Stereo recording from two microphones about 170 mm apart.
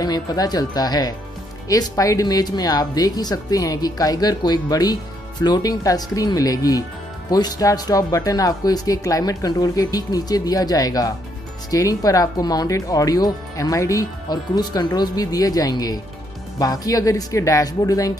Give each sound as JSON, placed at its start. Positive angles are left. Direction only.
{"t": 0.0, "sound": "speech", "side_deg": 25}